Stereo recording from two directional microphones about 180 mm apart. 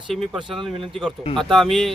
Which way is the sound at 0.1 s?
Centre (ahead or behind).